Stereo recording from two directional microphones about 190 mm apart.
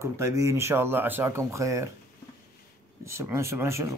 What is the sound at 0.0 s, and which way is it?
Speech, 15° right (ahead or behind).